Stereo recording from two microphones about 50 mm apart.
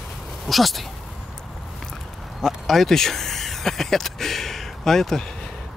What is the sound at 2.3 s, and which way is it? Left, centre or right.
Speech, centre.